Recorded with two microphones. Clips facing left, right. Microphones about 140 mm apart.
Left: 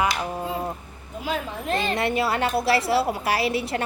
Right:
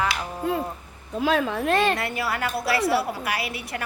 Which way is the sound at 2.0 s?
25° left (ahead or behind).